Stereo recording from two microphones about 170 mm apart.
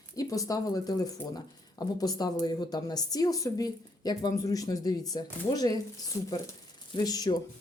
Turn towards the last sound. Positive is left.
turn(degrees=20)  # may be behind; listen again after turning